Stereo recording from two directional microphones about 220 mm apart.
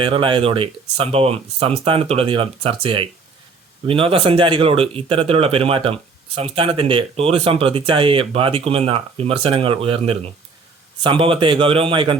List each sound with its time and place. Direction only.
0.0 s speech: 25° right (ahead or behind)